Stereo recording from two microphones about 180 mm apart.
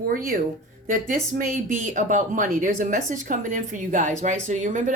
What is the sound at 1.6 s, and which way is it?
A woman's voice, 45° right (ahead or behind).